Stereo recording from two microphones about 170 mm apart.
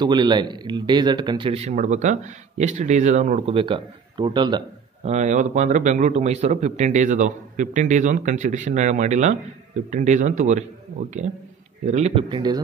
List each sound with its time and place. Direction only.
0.0 s speech: 25° right (ahead or behind); by 3.5 s 45° right (ahead or behind)
3.5 s speech: 30° right (ahead or behind)
5.0 s a man's voice: 40° right (ahead or behind)
12.3 s speech: 25° right (ahead or behind)